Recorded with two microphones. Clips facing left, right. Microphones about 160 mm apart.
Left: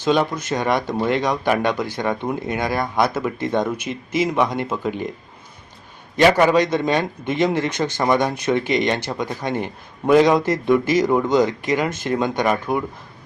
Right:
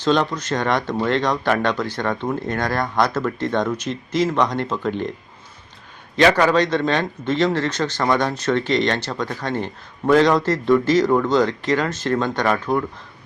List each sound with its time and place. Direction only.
0.0 s speech: 10° left (ahead or behind)
6.1 s speech: 15° left (ahead or behind)